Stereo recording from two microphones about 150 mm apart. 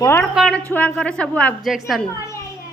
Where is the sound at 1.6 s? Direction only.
Centre (ahead or behind).